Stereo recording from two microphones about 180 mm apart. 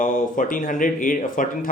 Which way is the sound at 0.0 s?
50° left (ahead or behind).